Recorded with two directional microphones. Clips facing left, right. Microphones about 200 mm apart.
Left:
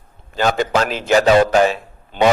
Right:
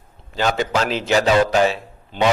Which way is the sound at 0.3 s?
45° left (ahead or behind).